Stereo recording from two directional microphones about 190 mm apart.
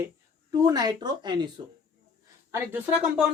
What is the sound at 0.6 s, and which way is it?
Speech, 20° right (ahead or behind).